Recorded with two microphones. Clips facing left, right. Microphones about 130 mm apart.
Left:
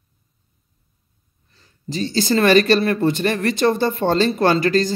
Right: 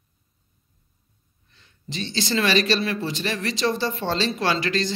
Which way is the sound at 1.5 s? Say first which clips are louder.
Left 8 dB; 40° left (ahead or behind).